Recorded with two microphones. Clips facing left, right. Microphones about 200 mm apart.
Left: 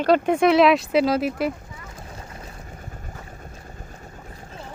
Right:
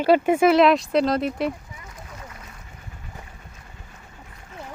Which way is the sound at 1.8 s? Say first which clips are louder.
Left 1 dB; 30° left (ahead or behind).